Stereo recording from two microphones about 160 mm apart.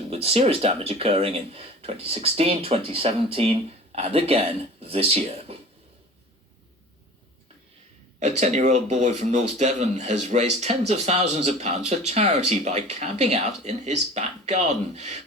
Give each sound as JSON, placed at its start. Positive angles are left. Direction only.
{"t": 0.1, "sound": "speech", "side_deg": -40}
{"t": 8.2, "sound": "speech", "side_deg": -45}